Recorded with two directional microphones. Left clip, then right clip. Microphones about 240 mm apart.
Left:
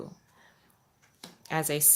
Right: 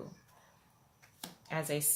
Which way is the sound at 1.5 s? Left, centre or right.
Left.